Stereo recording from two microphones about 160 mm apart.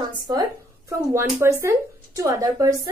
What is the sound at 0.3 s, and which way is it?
Speech, 20° right (ahead or behind).